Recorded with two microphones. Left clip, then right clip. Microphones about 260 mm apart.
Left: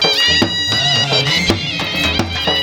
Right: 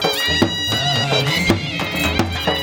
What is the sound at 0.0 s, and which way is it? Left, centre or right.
Music, centre.